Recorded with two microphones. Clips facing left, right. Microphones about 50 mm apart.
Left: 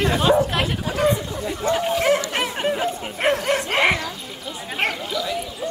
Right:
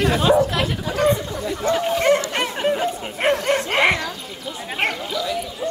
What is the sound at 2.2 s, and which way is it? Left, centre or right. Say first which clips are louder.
Dog: right 1 dB; centre.